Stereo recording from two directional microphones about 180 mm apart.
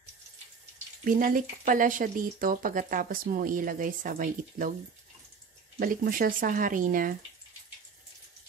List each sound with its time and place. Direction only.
1.0 s speech: 50° right (ahead or behind)
5.8 s speech: 50° right (ahead or behind)